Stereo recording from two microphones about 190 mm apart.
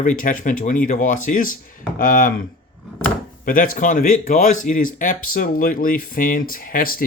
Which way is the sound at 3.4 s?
45° left (ahead or behind).